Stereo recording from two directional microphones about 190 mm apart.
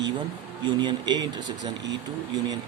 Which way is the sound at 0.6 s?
25° right (ahead or behind).